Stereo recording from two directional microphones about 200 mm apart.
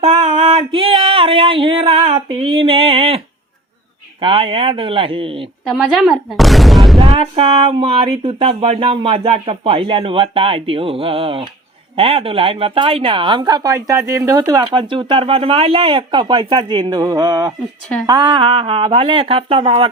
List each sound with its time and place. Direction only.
0.0 s a sound: 30° right (ahead or behind)
4.2 s speech: 25° right (ahead or behind)
5.6 s a woman's voice: centre (ahead or behind)
7.0 s speech: 30° right (ahead or behind)